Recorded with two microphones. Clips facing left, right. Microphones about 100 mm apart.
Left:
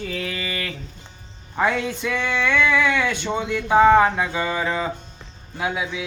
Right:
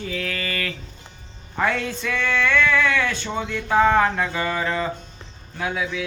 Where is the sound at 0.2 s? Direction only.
15° left (ahead or behind).